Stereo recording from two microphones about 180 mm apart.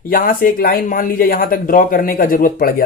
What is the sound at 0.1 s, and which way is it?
Speech, 50° left (ahead or behind).